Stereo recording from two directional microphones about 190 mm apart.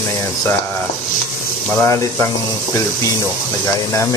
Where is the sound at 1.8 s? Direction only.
15° left (ahead or behind).